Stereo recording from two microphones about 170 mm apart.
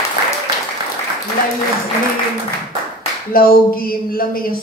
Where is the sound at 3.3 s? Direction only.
60° left (ahead or behind).